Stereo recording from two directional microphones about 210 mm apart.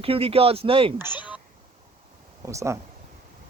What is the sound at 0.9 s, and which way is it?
Speech, 10° right (ahead or behind).